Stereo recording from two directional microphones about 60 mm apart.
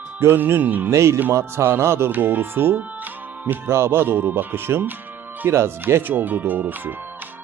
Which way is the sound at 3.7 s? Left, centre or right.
Right.